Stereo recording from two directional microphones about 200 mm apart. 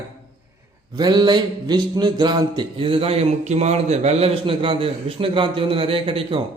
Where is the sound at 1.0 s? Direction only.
20° right (ahead or behind).